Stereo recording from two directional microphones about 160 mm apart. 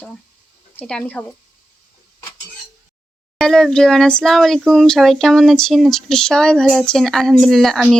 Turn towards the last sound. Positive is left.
turn(degrees=0)  # may be behind; listen again after turning